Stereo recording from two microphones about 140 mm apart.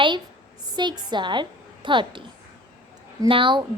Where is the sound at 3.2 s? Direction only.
35° right (ahead or behind).